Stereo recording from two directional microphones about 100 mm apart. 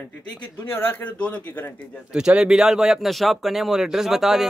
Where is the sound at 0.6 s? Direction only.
20° left (ahead or behind).